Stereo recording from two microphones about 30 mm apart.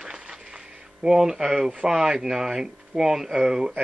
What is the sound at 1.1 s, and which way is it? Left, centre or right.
Speech, centre.